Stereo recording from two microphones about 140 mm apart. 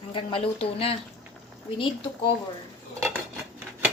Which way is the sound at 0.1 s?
40° left (ahead or behind).